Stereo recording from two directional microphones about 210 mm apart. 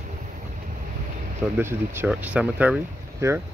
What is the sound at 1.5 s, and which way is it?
Speech, 10° right (ahead or behind).